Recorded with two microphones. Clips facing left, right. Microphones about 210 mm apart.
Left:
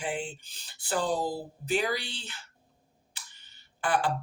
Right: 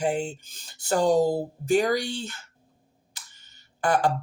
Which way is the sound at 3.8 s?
45° right (ahead or behind).